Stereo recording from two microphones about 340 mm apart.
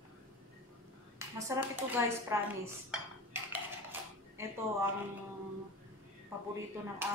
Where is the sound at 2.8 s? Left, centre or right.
Centre.